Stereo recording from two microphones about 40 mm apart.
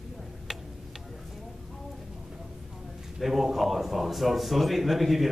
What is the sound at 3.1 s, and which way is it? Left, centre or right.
A man's voice, centre.